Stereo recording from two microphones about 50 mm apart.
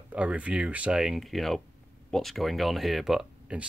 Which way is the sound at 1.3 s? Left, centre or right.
Centre.